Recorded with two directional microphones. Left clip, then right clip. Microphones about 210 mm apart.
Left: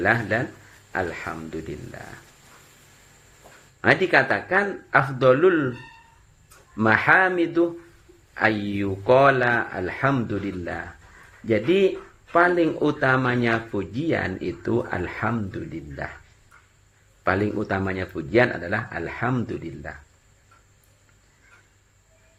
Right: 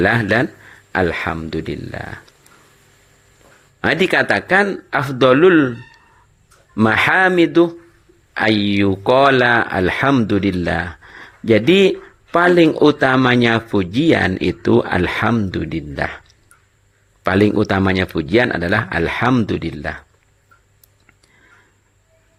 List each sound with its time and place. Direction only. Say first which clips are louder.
0.0 s speech: right 7 dB; 50° right (ahead or behind)
3.8 s speech: right 3 dB; 45° right (ahead or behind)
6.7 s speech: right 4 dB; 45° right (ahead or behind)
17.2 s speech: right 8 dB; 45° right (ahead or behind)